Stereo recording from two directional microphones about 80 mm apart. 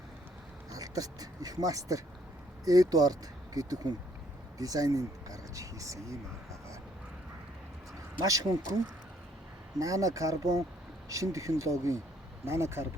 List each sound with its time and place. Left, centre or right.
0.7 s speech: right
8.2 s speech: right
9.7 s speech: right